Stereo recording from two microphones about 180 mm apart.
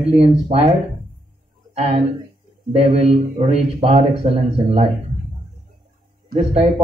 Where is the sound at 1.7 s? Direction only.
35° right (ahead or behind).